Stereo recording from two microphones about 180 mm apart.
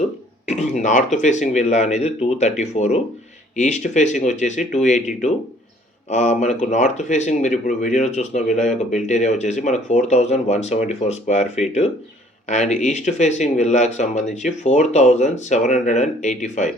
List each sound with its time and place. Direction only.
0.4 s speech: 40° left (ahead or behind)